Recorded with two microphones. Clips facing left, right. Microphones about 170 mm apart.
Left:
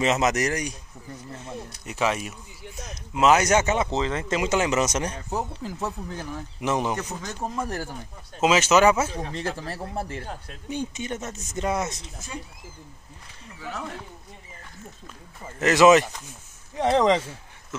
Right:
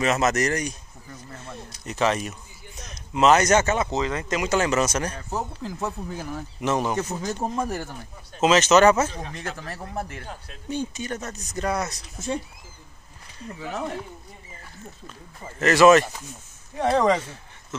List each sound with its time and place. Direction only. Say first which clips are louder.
0.0 s speech: even; 15° left (ahead or behind)
1.9 s a man's voice: right 2 dB; 10° left (ahead or behind)
3.7 s speech: even; 25° left (ahead or behind)
5.6 s speech: right 1 dB; 5° left (ahead or behind)
7.1 s speech: right 5 dB; 10° right (ahead or behind)
7.3 s speech: right 1 dB; 20° right (ahead or behind)
8.4 s speech: right 2 dB; 10° left (ahead or behind)
9.2 s speech: left 3 dB; 30° left (ahead or behind)
10.7 s speech: right 1 dB; 20° left (ahead or behind)
13.7 s speech: right 4 dB; 25° right (ahead or behind)
15.6 s speech: right 1 dB; 15° left (ahead or behind)